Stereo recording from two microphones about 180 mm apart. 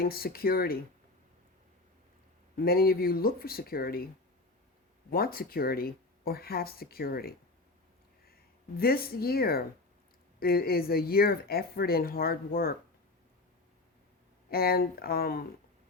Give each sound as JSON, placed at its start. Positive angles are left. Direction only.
{"t": 0.0, "sound": "speech", "side_deg": 55}
{"t": 2.6, "sound": "speech", "side_deg": 55}
{"t": 5.1, "sound": "speech", "side_deg": 55}
{"t": 8.8, "sound": "speech", "side_deg": 55}
{"t": 14.5, "sound": "speech", "side_deg": 55}